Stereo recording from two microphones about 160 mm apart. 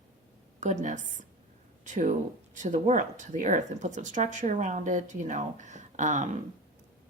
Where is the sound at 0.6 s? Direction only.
50° right (ahead or behind).